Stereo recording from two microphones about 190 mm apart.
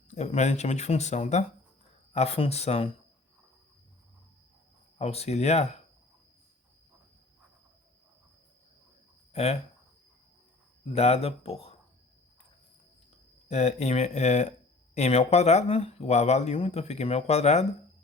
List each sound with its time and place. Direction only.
0.1 s speech: 35° left (ahead or behind)
4.9 s speech: 35° left (ahead or behind)
9.3 s speech: 35° left (ahead or behind)
10.9 s speech: 30° left (ahead or behind)
13.5 s speech: 35° left (ahead or behind)